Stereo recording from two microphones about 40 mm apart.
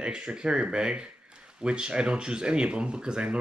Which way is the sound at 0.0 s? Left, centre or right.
Right.